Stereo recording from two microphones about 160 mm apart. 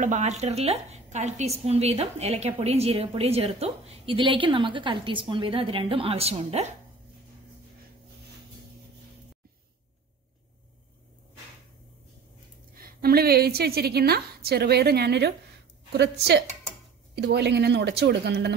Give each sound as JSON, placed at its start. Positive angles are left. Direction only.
{"t": 0.0, "sound": "a woman's voice", "side_deg": -50}
{"t": 12.7, "sound": "a woman's voice", "side_deg": -65}